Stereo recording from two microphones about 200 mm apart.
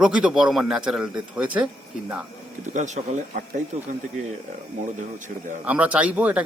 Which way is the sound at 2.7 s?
35° right (ahead or behind).